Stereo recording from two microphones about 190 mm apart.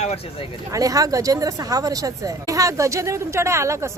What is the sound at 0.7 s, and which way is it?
Speech, 20° right (ahead or behind).